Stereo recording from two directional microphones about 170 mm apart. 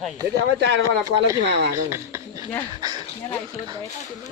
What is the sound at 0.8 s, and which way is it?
Speech, 20° right (ahead or behind).